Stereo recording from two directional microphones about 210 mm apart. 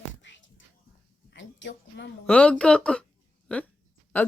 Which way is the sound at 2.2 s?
5° left (ahead or behind).